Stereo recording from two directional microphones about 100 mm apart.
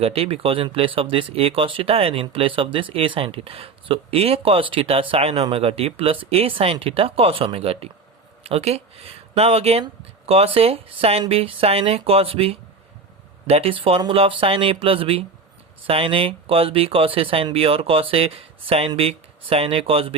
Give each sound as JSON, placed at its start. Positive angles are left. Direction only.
{"t": 0.0, "sound": "speech", "side_deg": -75}